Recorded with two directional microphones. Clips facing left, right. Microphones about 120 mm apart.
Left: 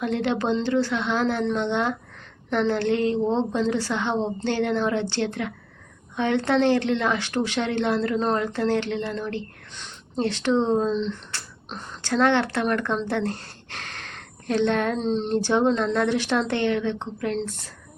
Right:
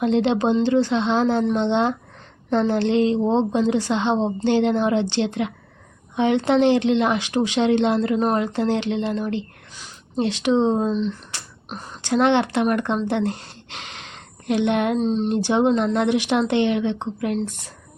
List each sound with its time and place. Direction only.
0.0 s speech: 25° right (ahead or behind)
13.1 s a sound: 20° right (ahead or behind)
14.9 s speech: 5° right (ahead or behind)